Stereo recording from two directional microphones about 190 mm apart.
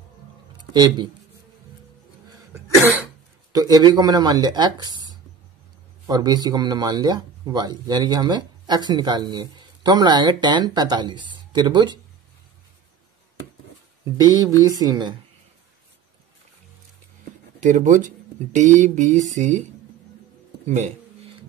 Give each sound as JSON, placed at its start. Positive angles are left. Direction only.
{"t": 0.6, "sound": "a sound", "side_deg": -25}
{"t": 3.5, "sound": "speech", "side_deg": -20}
{"t": 6.0, "sound": "speech", "side_deg": -20}
{"t": 14.6, "sound": "speech", "side_deg": -20}
{"t": 17.6, "sound": "speech", "side_deg": -40}